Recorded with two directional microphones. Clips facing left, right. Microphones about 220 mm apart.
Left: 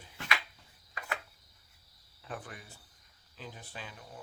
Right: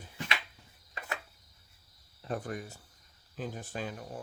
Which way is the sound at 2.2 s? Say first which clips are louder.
Right 8 dB; 40° right (ahead or behind).